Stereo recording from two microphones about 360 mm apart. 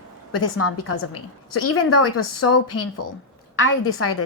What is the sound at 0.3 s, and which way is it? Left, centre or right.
A woman's voice, left.